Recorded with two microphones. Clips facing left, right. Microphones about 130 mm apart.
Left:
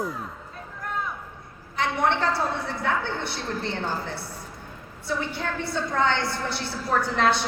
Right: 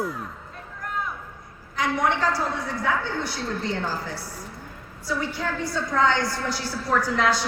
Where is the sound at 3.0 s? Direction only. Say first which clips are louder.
Right 1 dB; 60° left (ahead or behind).